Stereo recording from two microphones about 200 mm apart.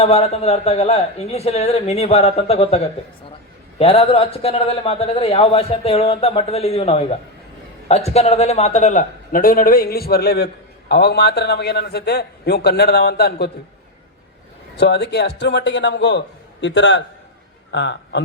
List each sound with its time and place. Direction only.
0.0 s a man's voice: 30° left (ahead or behind); by 13.5 s 55° left (ahead or behind)
14.8 s a man's voice: 55° left (ahead or behind)